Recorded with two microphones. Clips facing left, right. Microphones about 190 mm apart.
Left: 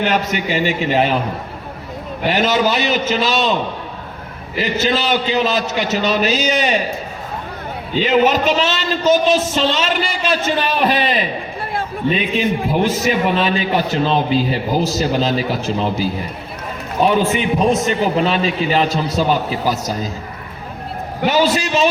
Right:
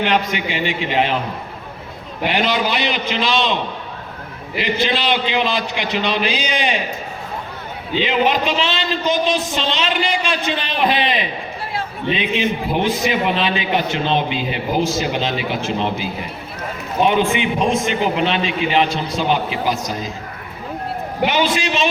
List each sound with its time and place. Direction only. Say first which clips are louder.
0.0 s a man's voice: left 1 dB; 40° left (ahead or behind)
2.3 s a man's voice: left 3 dB; 40° left (ahead or behind)
4.5 s a man's voice: left 2 dB; 40° left (ahead or behind)
7.9 s a man's voice: left 3 dB; 45° left (ahead or behind)
17.1 s a man's voice: left 2 dB; 40° left (ahead or behind)
21.2 s a man's voice: left 3 dB; 40° left (ahead or behind)